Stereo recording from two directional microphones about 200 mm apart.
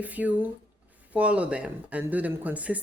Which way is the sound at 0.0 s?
10° right (ahead or behind).